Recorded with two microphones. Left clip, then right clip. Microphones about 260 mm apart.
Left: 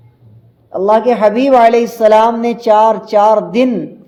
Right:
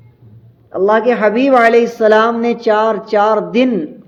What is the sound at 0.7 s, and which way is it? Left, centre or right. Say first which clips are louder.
A woman's voice: left 1 dB; centre.